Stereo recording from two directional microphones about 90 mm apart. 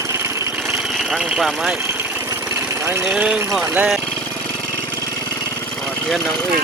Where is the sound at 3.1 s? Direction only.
10° right (ahead or behind).